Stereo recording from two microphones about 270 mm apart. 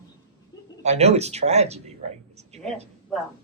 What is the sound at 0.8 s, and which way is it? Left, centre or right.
Speech, right.